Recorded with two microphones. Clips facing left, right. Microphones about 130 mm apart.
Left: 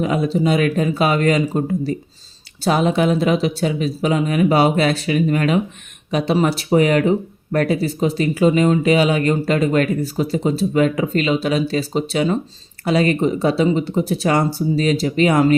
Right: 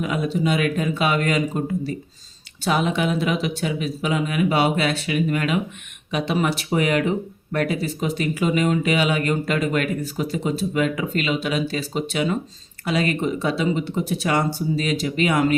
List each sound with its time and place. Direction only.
0.0 s speech: 35° left (ahead or behind)